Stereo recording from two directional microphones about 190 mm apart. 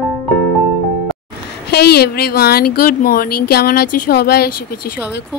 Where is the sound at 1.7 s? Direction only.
60° left (ahead or behind).